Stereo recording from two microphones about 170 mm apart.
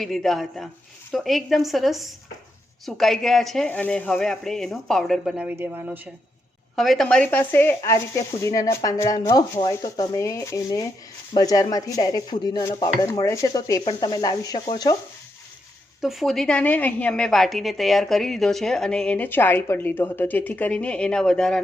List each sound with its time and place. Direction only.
0.0 s a woman's voice: centre (ahead or behind)
6.7 s speech: centre (ahead or behind); by 14.9 s 25° left (ahead or behind)
16.0 s a woman's voice: centre (ahead or behind)